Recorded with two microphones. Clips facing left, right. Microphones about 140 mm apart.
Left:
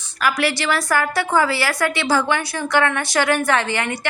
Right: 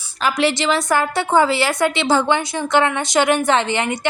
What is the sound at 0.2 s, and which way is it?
A woman's voice, 25° right (ahead or behind).